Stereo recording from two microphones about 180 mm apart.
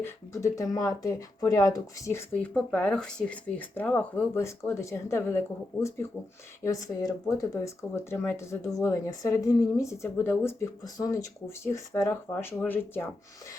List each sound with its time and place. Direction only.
0.0 s speech: 15° left (ahead or behind)
6.6 s speech: 20° left (ahead or behind)